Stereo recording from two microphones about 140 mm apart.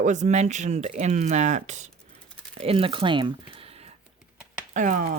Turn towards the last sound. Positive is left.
turn(degrees=-70)  # may be behind; listen again after turning